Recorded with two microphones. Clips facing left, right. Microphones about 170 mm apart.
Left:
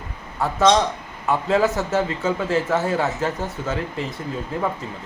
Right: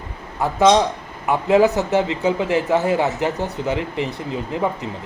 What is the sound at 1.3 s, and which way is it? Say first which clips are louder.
A man's voice: right 4 dB; 15° right (ahead or behind).